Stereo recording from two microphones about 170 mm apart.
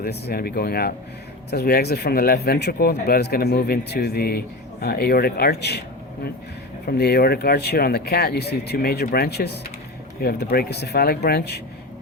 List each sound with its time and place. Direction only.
0.0 s speech: 65° left (ahead or behind)
6.8 s speech: 70° left (ahead or behind)